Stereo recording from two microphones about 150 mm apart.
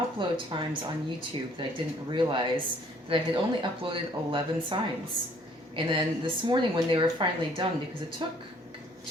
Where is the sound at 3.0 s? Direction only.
35° right (ahead or behind).